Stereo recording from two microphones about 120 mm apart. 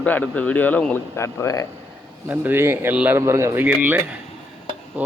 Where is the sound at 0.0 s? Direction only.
10° left (ahead or behind).